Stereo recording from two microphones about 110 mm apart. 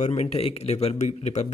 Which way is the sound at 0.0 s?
70° left (ahead or behind).